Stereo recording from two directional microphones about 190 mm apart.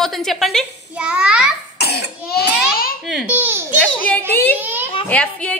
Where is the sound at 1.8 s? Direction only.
55° left (ahead or behind).